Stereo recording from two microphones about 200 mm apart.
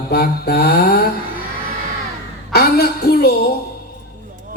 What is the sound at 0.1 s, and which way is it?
Mantra, 50° left (ahead or behind).